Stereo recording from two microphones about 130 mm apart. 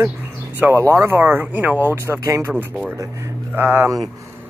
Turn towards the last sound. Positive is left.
turn(degrees=-25)  # may be behind; listen again after turning